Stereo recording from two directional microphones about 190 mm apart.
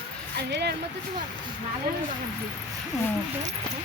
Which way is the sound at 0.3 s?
60° right (ahead or behind).